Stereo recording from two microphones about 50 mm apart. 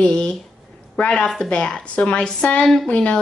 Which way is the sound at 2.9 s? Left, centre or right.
Left.